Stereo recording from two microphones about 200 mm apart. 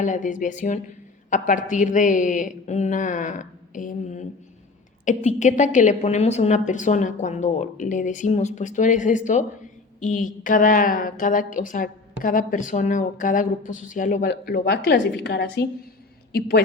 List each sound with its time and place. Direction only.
0.0 s a woman's voice: 40° left (ahead or behind)
14.3 s a woman's voice: 55° left (ahead or behind)